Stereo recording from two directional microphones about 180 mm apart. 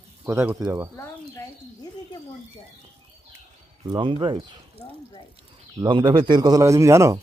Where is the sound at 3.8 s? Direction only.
25° right (ahead or behind).